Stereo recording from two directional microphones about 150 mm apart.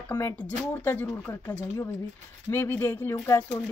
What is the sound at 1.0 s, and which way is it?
A woman's voice, 15° left (ahead or behind).